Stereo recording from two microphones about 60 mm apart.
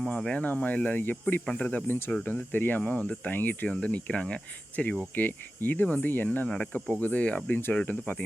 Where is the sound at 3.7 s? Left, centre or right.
Left.